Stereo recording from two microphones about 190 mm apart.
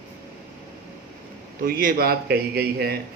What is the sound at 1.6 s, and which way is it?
A man's voice, 50° right (ahead or behind).